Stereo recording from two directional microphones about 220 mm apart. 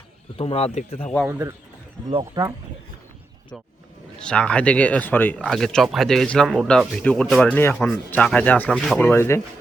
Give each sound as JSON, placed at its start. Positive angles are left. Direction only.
{"t": 0.3, "sound": "speech", "side_deg": 25}
{"t": 1.3, "sound": "speech", "side_deg": -10}
{"t": 4.2, "sound": "speech", "side_deg": 5}